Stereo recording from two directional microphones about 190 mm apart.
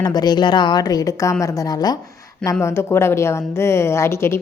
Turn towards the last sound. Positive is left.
turn(degrees=15)  # may be behind; listen again after turning